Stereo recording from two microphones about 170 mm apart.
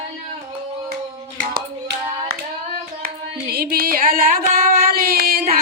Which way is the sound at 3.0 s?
60° right (ahead or behind).